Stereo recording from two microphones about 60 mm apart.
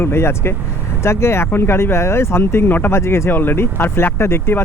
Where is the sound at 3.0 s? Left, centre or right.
Left.